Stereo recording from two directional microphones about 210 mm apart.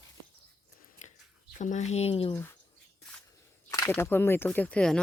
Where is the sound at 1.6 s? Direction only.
35° left (ahead or behind).